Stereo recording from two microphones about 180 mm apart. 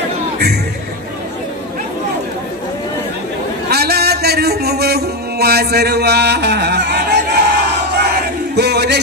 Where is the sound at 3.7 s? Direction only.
60° right (ahead or behind).